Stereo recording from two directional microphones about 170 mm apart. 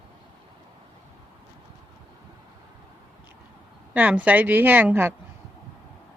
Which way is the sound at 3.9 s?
10° right (ahead or behind).